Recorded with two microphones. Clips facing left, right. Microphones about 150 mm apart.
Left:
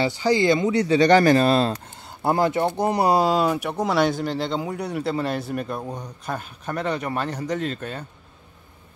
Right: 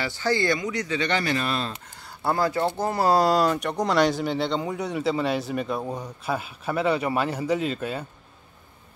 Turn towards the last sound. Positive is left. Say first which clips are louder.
# right 2 dB
turn(degrees=-5)  # may be behind; listen again after turning